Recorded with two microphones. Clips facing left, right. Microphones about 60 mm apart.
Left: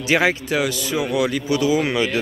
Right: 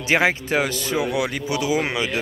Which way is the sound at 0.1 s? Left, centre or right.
Right.